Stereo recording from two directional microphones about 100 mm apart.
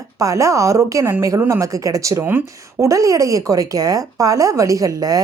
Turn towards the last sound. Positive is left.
turn(degrees=-35)  # may be behind; listen again after turning